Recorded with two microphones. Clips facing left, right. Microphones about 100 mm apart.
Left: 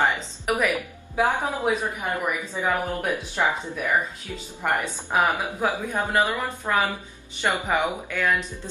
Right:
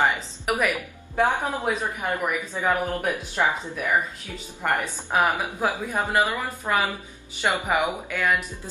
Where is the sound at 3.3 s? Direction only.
15° right (ahead or behind).